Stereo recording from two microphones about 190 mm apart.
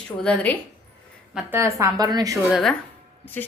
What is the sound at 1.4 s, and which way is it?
Speech, 10° right (ahead or behind).